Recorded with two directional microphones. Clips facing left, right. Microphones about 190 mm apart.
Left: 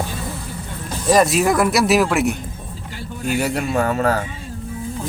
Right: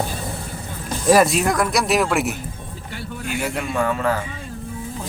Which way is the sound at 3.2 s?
40° left (ahead or behind).